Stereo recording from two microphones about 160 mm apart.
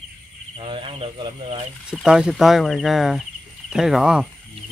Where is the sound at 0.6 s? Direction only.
35° right (ahead or behind).